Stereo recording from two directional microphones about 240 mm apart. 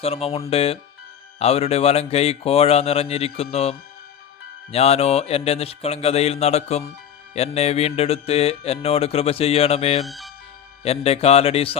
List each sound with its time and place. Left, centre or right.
0.0 s mantra: left
10.0 s speech: centre
10.8 s mantra: left